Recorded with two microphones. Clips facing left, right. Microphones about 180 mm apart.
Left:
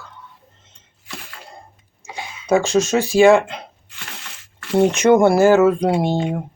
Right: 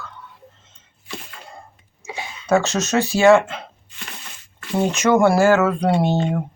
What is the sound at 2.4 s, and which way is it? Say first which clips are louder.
Speech: left 3 dB; 10° left (ahead or behind).